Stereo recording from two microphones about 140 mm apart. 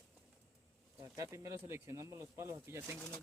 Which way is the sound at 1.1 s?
25° right (ahead or behind).